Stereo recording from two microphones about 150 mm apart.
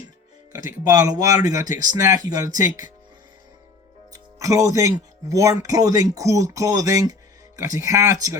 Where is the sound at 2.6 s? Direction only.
60° left (ahead or behind).